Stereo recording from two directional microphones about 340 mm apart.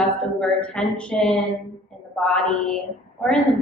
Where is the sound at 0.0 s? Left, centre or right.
Centre.